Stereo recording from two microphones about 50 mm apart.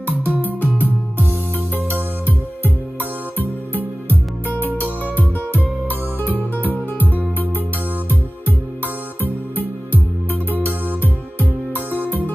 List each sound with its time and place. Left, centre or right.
0.1 s music: right
0.4 s music: left
2.2 s music: left
8.1 s music: left
11.0 s music: left